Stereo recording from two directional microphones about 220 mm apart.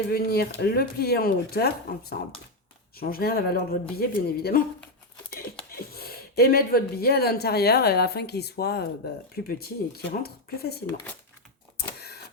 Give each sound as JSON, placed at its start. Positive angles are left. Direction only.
{"t": 0.1, "sound": "speech", "side_deg": 45}
{"t": 5.7, "sound": "speech", "side_deg": 45}
{"t": 11.8, "sound": "a sound", "side_deg": 45}